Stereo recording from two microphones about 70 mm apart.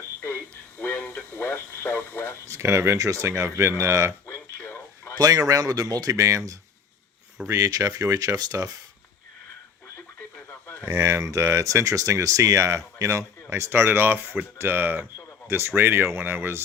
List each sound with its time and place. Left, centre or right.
0.2 s radio: left
2.5 s speech: right
4.3 s radio: left
5.1 s speech: right
10.9 s speech: right